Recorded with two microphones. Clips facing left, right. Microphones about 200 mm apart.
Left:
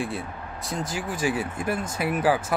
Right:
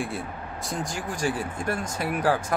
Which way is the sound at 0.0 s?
Centre (ahead or behind).